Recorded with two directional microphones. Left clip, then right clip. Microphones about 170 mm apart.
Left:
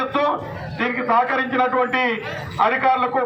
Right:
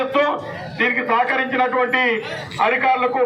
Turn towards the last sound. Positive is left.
turn(degrees=25)  # may be behind; listen again after turning